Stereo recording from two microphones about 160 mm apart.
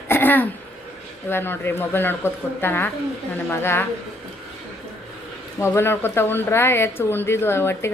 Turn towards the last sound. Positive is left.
turn(degrees=15)  # may be behind; listen again after turning